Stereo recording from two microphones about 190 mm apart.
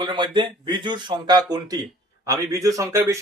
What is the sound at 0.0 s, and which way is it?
A man's voice, 25° right (ahead or behind).